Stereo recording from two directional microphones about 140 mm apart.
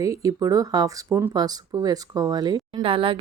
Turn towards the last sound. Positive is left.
turn(degrees=-40)  # may be behind; listen again after turning